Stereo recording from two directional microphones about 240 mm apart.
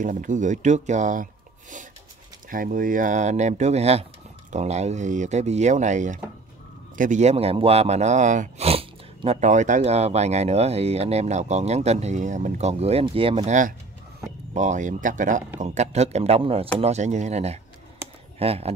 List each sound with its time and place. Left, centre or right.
0.0 s speech: right